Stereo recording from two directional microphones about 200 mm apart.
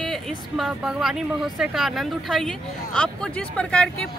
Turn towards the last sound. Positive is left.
turn(degrees=5)  # may be behind; listen again after turning